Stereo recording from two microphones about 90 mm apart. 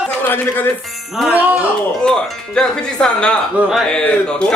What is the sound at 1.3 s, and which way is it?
Speech, 20° right (ahead or behind).